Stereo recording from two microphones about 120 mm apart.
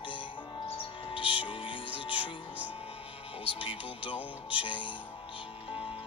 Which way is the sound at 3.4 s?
50° left (ahead or behind).